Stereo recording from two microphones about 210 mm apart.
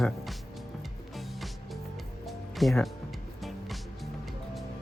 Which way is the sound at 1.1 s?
Centre (ahead or behind).